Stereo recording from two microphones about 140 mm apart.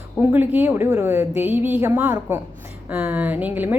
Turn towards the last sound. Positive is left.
turn(degrees=-10)  # may be behind; listen again after turning